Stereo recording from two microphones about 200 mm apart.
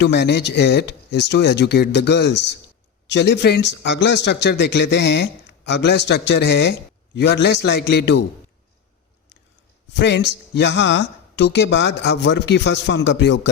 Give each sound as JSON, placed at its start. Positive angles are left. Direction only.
{"t": 0.0, "sound": "speech", "side_deg": 60}
{"t": 10.0, "sound": "speech", "side_deg": 60}